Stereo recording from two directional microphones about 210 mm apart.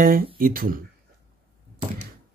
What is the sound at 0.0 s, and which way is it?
Speech, 45° right (ahead or behind).